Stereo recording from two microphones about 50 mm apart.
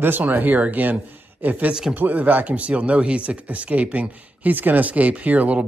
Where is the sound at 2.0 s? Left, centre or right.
Right.